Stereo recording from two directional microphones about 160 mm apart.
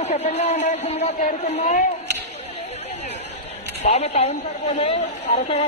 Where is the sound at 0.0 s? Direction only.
40° left (ahead or behind).